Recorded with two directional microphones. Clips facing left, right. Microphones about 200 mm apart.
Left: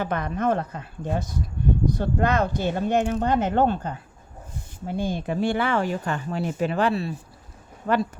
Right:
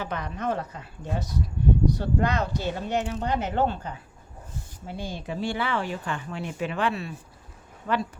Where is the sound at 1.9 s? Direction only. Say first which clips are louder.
Left 2 dB; 50° left (ahead or behind).